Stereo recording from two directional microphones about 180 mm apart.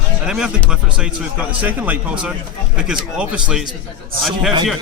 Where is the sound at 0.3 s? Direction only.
5° right (ahead or behind).